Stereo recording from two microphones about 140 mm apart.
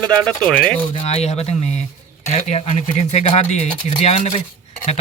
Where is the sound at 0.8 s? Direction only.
45° left (ahead or behind).